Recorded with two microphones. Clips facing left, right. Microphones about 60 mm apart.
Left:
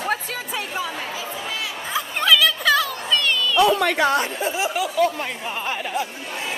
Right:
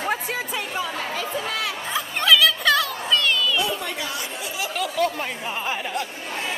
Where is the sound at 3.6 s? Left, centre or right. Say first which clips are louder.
Left 10 dB; left.